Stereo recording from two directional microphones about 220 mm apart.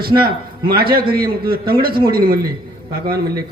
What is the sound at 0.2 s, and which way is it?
A man's voice, 45° right (ahead or behind).